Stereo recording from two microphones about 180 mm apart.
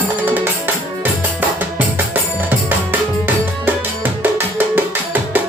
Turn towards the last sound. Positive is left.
turn(degrees=-10)  # may be behind; listen again after turning